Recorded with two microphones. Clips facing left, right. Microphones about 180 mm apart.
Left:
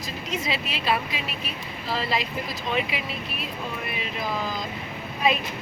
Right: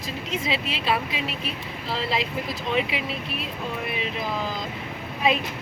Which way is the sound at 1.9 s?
25° right (ahead or behind).